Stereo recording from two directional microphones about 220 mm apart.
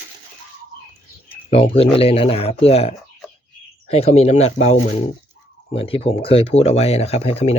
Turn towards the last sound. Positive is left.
turn(degrees=30)  # may be behind; listen again after turning